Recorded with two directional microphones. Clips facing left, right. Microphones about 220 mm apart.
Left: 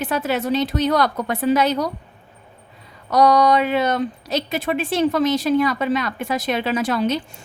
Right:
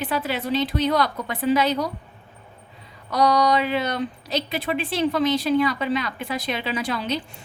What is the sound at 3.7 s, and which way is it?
Speech, 45° left (ahead or behind).